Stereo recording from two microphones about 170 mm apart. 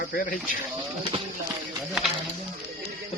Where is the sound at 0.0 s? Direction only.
60° left (ahead or behind).